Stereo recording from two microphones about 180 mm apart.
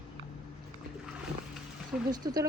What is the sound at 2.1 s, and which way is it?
Speech, 20° right (ahead or behind).